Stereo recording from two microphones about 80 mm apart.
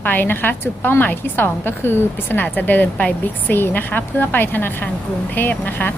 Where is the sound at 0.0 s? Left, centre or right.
Left.